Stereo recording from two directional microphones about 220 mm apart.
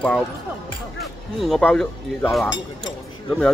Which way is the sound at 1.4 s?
5° left (ahead or behind).